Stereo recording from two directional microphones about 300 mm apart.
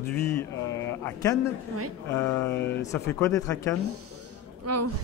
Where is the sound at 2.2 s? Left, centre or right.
Centre.